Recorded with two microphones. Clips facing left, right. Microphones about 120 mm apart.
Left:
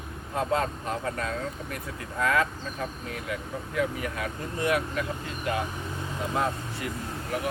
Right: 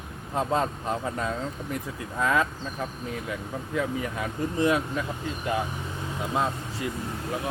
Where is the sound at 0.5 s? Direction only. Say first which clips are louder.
Right 1 dB; 20° right (ahead or behind).